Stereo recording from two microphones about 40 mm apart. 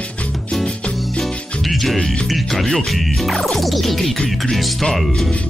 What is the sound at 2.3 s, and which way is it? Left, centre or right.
Speech, centre.